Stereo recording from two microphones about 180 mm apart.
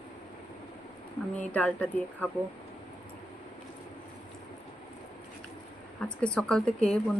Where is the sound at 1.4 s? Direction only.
5° left (ahead or behind).